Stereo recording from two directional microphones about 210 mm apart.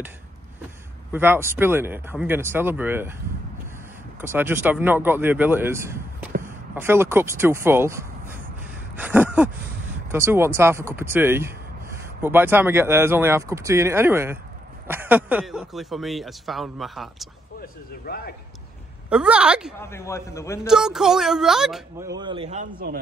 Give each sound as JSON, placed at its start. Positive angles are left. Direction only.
{"t": 1.1, "sound": "speech", "side_deg": -10}
{"t": 4.2, "sound": "speech", "side_deg": -10}
{"t": 8.9, "sound": "a sound", "side_deg": -10}
{"t": 10.1, "sound": "a man's voice", "side_deg": -10}
{"t": 17.6, "sound": "speech", "side_deg": 45}
{"t": 19.0, "sound": "a man's voice", "side_deg": -5}
{"t": 19.8, "sound": "a man's voice", "side_deg": 15}
{"t": 20.6, "sound": "a man's voice", "side_deg": 0}
{"t": 22.0, "sound": "a man's voice", "side_deg": -20}